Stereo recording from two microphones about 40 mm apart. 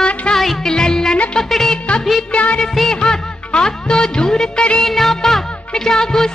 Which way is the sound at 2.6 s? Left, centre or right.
Centre.